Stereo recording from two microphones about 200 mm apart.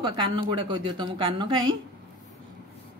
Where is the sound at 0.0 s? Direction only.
25° right (ahead or behind).